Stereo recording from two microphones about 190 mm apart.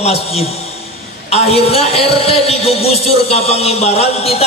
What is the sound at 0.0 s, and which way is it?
A man's voice, 30° left (ahead or behind).